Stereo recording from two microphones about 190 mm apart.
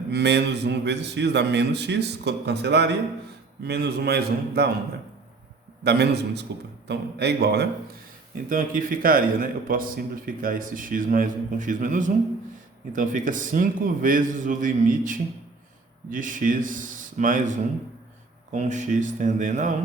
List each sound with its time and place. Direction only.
0.1 s a man's voice: 60° right (ahead or behind)
5.8 s a man's voice: 60° right (ahead or behind)
8.4 s a man's voice: 45° right (ahead or behind)